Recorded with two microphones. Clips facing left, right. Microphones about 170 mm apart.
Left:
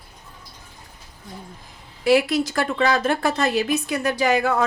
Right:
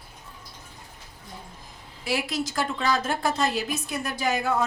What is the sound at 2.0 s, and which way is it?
A woman's voice, 65° left (ahead or behind).